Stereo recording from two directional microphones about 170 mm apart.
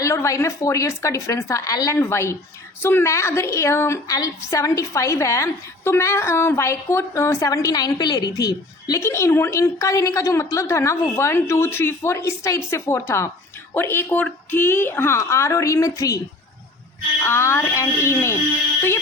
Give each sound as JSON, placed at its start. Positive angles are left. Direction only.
{"t": 0.0, "sound": "a woman's voice", "side_deg": 15}
{"t": 17.2, "sound": "a woman's voice", "side_deg": 15}